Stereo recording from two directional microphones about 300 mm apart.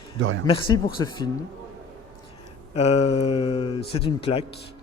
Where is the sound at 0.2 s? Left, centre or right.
Right.